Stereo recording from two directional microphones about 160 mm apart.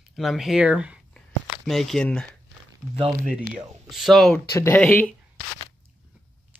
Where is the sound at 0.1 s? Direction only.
Centre (ahead or behind).